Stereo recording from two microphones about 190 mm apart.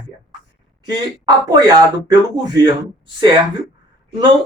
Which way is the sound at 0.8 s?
20° right (ahead or behind).